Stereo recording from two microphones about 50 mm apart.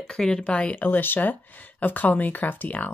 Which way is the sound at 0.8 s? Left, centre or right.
Left.